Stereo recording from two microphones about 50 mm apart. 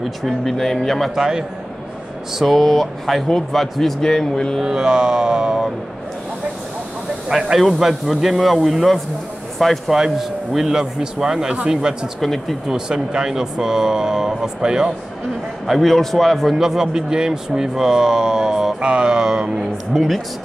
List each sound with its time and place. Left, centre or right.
0.2 s speech: centre
1.1 s speech: centre
2.3 s speech: centre
4.6 s speech: centre
7.5 s speech: centre
12.2 s speech: centre
12.6 s speech: centre
15.6 s speech: centre
16.5 s speech: centre
19.9 s speech: centre